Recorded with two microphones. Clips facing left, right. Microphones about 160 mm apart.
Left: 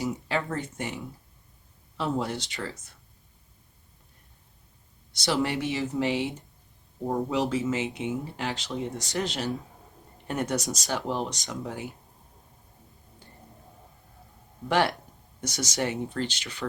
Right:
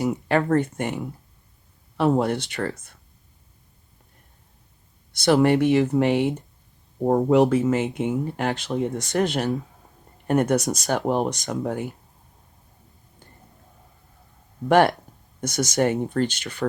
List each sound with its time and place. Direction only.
0.0 s speech: 55° right (ahead or behind)
5.1 s speech: 55° right (ahead or behind)
14.7 s speech: 50° right (ahead or behind)